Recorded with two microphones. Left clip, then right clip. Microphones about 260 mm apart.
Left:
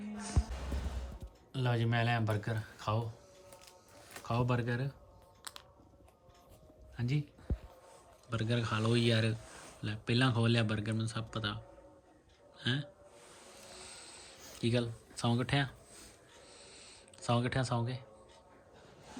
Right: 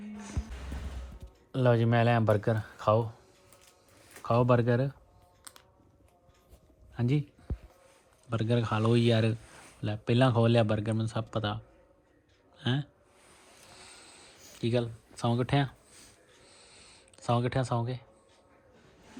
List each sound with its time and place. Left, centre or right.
0.2 s music: centre
1.6 s speech: centre
6.9 s speech: centre
7.5 s a sound: centre
8.3 s speech: centre
13.7 s a sound: centre